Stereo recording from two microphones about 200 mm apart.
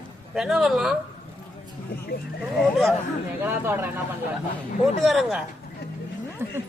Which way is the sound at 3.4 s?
10° right (ahead or behind).